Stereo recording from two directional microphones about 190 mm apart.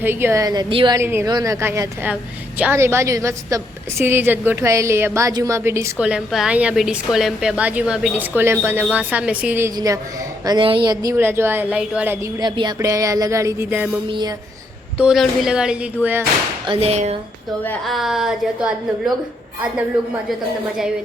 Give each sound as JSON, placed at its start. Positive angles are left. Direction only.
{"t": 0.0, "sound": "a woman's voice", "side_deg": -10}
{"t": 0.9, "sound": "a woman's voice", "side_deg": -15}
{"t": 14.1, "sound": "a woman's voice", "side_deg": -20}
{"t": 14.9, "sound": "a woman's voice", "side_deg": -5}
{"t": 16.6, "sound": "a sound", "side_deg": -35}
{"t": 17.6, "sound": "a woman's voice", "side_deg": 5}